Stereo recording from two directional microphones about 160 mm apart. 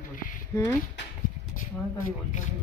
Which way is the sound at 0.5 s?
15° left (ahead or behind).